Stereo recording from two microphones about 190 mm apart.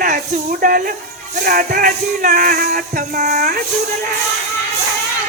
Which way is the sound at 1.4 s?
50° right (ahead or behind).